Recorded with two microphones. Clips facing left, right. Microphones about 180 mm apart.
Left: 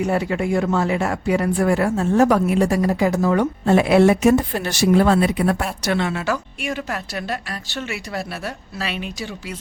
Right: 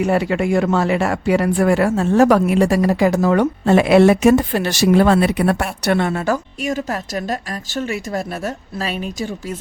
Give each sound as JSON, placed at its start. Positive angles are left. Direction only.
{"t": 0.0, "sound": "speech", "side_deg": -90}